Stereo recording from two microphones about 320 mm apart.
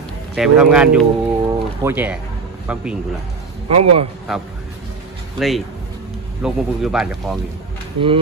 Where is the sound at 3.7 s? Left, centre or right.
Right.